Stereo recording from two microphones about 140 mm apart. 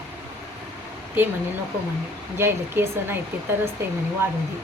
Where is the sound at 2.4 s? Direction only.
15° right (ahead or behind).